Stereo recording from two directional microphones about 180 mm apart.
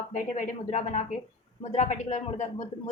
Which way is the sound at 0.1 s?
45° left (ahead or behind).